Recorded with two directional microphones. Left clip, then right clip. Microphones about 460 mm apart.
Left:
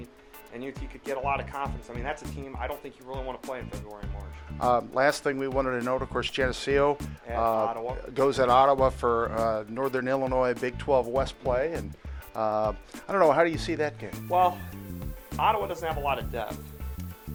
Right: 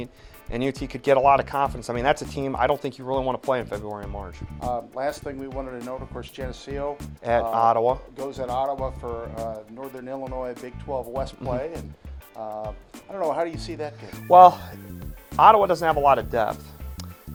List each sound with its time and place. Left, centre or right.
0.5 s speech: right
3.7 s speech: centre
4.7 s speech: left
7.3 s speech: right
8.1 s speech: left
12.4 s speech: left
14.3 s speech: right